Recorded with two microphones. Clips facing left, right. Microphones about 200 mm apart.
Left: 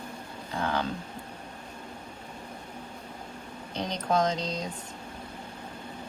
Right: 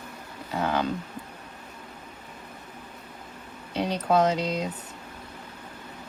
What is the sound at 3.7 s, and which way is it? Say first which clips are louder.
Speech: right 4 dB; 10° right (ahead or behind).